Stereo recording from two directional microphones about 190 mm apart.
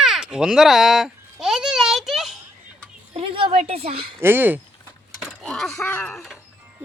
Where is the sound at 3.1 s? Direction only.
30° right (ahead or behind).